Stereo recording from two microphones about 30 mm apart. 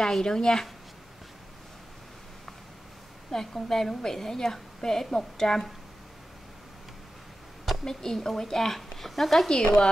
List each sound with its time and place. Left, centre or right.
0.2 s a woman's voice: left
3.3 s a woman's voice: centre
7.8 s a woman's voice: centre
9.5 s a woman's voice: left